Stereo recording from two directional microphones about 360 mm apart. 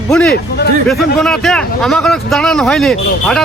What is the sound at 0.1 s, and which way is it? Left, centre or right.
Speech, centre.